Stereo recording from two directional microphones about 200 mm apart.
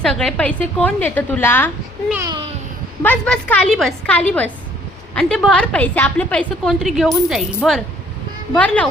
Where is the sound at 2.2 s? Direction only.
20° right (ahead or behind).